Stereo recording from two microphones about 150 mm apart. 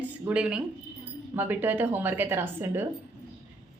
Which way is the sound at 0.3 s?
5° right (ahead or behind).